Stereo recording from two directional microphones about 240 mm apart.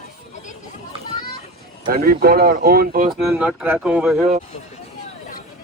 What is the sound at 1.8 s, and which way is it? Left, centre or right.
Speech, right.